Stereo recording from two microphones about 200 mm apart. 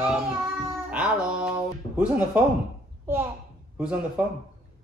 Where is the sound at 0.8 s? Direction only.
5° right (ahead or behind).